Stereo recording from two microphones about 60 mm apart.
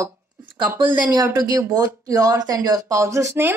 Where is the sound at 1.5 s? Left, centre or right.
Right.